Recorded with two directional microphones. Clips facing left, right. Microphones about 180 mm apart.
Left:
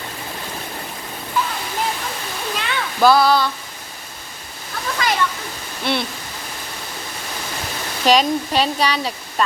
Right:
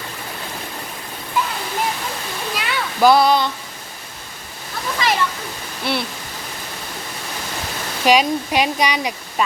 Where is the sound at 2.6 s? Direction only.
10° right (ahead or behind).